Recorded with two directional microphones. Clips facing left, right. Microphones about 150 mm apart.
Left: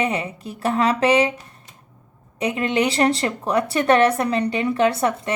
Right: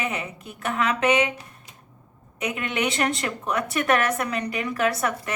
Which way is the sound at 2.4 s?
30° left (ahead or behind).